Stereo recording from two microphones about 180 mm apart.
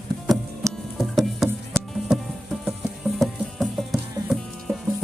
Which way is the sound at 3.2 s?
Centre (ahead or behind).